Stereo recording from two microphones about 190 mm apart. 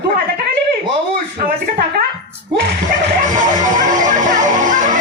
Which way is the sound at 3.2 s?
45° right (ahead or behind).